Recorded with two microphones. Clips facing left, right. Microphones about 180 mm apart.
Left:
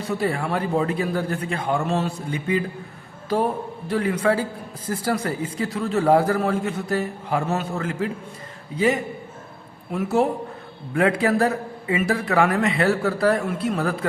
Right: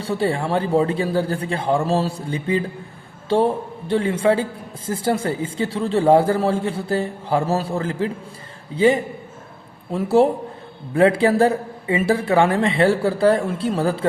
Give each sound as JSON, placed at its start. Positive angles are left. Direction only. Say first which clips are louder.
{"t": 0.0, "sound": "a man's voice", "louder": "right 3 dB", "side_deg": -30}